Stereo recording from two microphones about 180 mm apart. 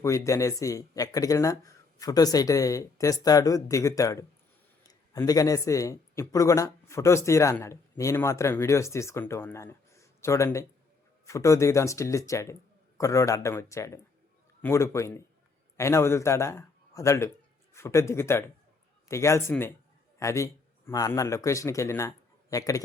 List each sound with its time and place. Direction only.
0.0 s a man's voice: 15° left (ahead or behind)